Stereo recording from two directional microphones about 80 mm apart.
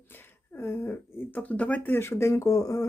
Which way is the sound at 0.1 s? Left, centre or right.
Left.